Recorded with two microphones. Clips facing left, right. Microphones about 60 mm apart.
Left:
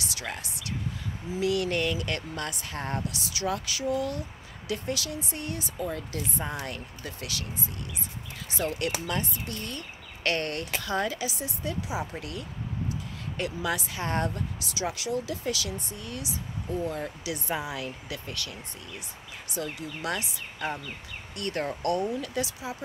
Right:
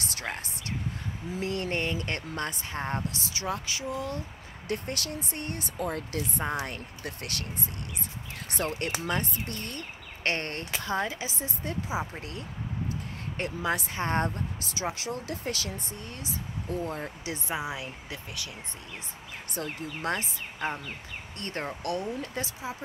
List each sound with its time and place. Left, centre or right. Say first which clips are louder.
0.0 s speech: right 1 dB; right
4.6 s speech: left 1 dB; right
8.5 s speech: left 2 dB; right
17.5 s speech: left 1 dB; right
19.5 s speech: left 1 dB; right
21.8 s speech: left 5 dB; left
22.2 s speech: left 3 dB; right